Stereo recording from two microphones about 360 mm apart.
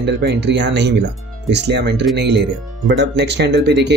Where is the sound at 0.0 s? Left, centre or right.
Right.